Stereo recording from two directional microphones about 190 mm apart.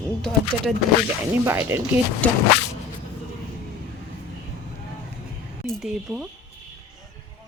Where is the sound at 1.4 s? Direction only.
10° right (ahead or behind).